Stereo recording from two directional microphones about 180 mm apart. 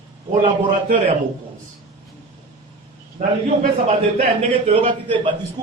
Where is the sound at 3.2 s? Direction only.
40° right (ahead or behind).